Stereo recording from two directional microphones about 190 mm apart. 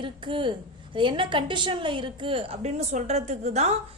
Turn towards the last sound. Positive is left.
turn(degrees=-35)  # may be behind; listen again after turning